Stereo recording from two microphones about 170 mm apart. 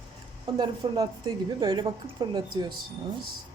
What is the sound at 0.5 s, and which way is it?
A woman's voice, 25° right (ahead or behind).